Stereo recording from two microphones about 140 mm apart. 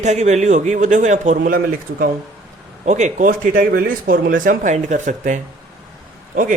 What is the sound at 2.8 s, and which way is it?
Speech, 55° right (ahead or behind).